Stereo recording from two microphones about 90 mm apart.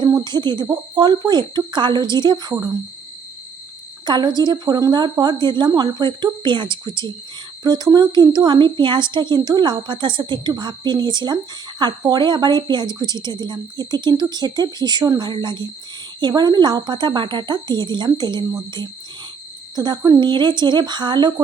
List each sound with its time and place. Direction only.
0.0 s a sound: 55° right (ahead or behind)
0.7 s a woman's voice: 50° right (ahead or behind)
4.0 s a woman's voice: 55° right (ahead or behind)
7.6 s a woman's voice: 50° right (ahead or behind)
15.2 s a woman's voice: 55° right (ahead or behind)
19.7 s a woman's voice: 55° right (ahead or behind)